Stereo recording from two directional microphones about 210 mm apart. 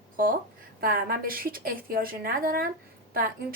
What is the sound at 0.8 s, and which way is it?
A woman's voice, 45° right (ahead or behind).